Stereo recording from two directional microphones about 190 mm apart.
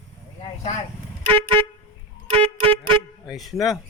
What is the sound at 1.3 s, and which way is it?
Vehicle horn, 30° right (ahead or behind).